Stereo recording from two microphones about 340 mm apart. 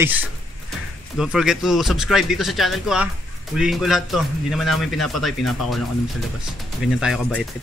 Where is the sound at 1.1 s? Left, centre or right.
Centre.